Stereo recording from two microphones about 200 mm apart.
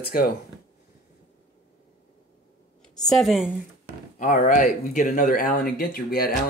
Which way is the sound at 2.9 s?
5° left (ahead or behind).